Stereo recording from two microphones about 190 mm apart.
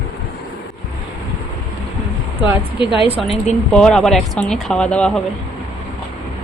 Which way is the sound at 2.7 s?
25° left (ahead or behind).